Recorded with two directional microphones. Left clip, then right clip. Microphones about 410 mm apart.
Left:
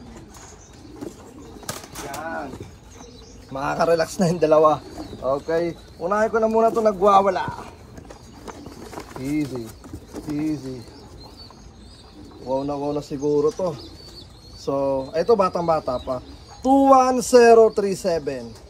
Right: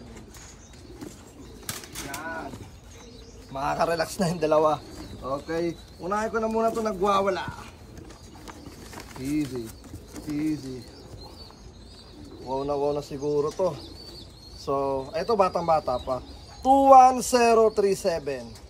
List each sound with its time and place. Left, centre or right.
3.5 s a man's voice: centre
6.0 s speech: left
7.1 s speech: centre
9.2 s speech: centre
12.4 s speech: centre